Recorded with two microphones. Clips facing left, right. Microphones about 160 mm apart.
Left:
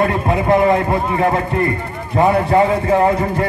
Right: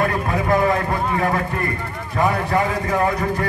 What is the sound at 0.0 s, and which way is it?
A man's voice, 25° left (ahead or behind).